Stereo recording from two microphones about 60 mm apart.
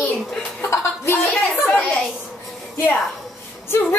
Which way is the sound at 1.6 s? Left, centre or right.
Left.